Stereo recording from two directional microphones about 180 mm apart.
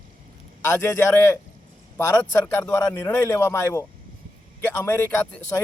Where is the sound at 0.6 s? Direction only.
10° left (ahead or behind).